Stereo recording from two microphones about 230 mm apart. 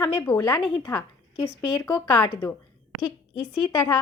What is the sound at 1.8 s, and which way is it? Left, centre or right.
Speech, centre.